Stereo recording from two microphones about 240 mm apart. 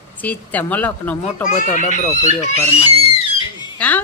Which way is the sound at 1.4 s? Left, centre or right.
Left.